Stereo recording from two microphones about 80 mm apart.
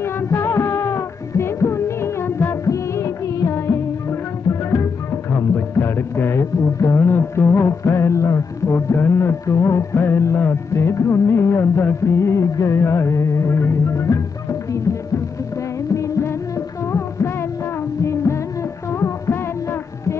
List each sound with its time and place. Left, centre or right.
0.0 s music: left
15.9 s music: left